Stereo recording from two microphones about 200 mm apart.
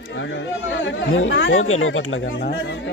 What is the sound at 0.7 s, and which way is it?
A man's voice, 70° left (ahead or behind).